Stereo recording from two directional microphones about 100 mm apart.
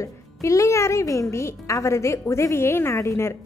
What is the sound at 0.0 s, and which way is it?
Speech, 30° left (ahead or behind).